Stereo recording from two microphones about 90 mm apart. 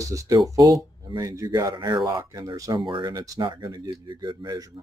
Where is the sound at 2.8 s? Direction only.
60° right (ahead or behind).